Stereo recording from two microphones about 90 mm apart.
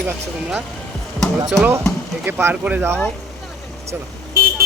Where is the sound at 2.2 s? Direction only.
20° right (ahead or behind).